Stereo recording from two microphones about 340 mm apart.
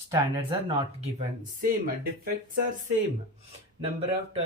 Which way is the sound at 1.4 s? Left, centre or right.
Right.